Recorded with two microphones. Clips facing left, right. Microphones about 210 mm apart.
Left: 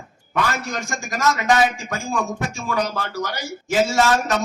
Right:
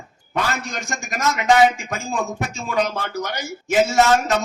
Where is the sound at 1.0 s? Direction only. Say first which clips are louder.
Left 2 dB; 20° right (ahead or behind).